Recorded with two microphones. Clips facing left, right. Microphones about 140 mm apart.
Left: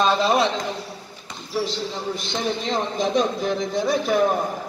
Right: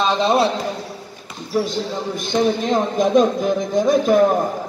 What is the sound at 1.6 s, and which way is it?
Speech, 50° right (ahead or behind).